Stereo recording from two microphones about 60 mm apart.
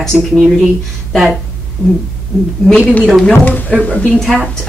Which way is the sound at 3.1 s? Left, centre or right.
Centre.